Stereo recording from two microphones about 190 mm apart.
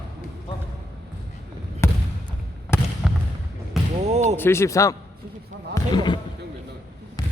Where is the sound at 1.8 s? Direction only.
15° left (ahead or behind).